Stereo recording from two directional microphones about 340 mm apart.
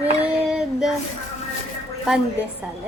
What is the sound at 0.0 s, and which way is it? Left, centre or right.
Female singing, centre.